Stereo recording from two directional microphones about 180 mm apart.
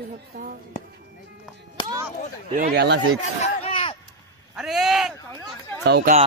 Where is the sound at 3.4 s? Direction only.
35° left (ahead or behind).